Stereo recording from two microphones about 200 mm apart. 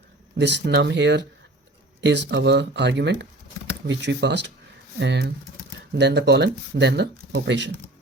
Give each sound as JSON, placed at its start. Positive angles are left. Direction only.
{"t": 0.3, "sound": "speech", "side_deg": -60}